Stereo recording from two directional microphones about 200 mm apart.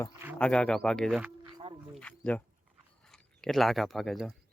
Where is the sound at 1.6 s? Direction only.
30° right (ahead or behind).